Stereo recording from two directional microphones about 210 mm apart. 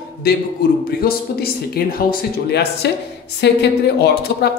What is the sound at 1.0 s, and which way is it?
A woman's voice, 45° left (ahead or behind).